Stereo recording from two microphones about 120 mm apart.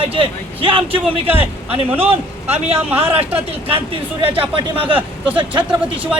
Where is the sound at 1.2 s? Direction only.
15° right (ahead or behind).